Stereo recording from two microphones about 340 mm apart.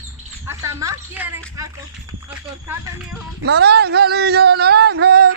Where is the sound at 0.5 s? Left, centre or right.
Centre.